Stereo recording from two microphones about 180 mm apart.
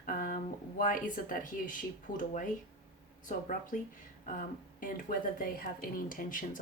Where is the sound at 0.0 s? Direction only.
45° left (ahead or behind).